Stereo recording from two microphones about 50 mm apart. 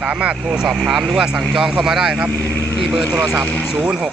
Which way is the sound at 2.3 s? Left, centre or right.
Left.